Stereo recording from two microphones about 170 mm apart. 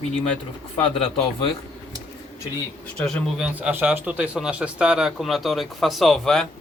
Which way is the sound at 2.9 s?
5° left (ahead or behind).